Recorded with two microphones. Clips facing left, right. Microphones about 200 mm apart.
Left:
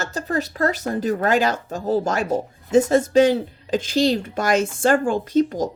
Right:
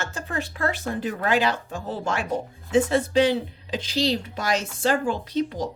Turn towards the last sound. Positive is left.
turn(degrees=45)  # may be behind; listen again after turning